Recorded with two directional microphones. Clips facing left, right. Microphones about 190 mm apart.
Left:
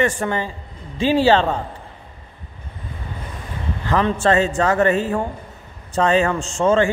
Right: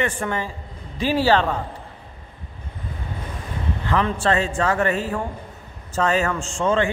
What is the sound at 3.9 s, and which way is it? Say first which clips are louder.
A man's voice: left 4 dB; 40° left (ahead or behind).